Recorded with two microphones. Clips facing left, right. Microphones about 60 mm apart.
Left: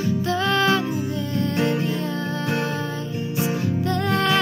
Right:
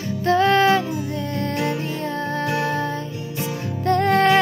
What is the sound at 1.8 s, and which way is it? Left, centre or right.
Music, right.